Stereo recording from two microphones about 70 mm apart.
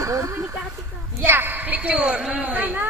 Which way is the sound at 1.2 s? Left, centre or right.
Right.